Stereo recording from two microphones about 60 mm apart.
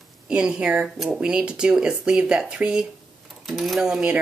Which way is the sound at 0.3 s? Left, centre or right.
Centre.